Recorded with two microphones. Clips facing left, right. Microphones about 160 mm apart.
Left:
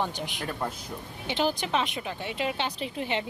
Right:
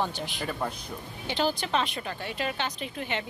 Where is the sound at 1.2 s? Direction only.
20° left (ahead or behind).